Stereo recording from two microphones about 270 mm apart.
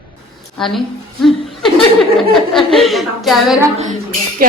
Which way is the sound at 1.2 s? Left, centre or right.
Centre.